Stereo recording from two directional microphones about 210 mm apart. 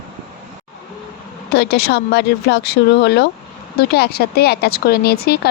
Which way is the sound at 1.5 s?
50° left (ahead or behind).